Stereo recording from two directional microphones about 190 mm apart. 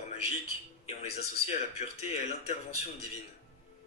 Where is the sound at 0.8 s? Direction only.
35° left (ahead or behind).